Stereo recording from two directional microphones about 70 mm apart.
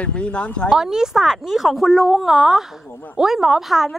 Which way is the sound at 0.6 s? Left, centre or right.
Centre.